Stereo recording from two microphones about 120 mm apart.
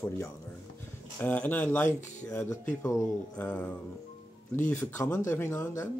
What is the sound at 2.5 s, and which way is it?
Speech, 25° left (ahead or behind).